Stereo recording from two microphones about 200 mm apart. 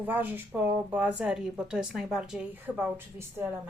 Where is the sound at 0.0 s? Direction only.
10° right (ahead or behind).